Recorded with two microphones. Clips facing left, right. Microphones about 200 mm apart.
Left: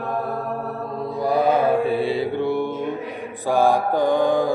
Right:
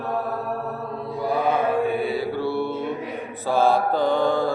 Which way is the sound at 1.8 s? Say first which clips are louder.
Left 2 dB; 30° left (ahead or behind).